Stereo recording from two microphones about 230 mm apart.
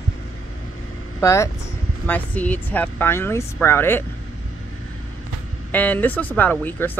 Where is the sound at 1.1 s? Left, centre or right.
Centre.